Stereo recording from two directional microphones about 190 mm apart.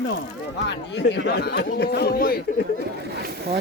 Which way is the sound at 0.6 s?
65° left (ahead or behind).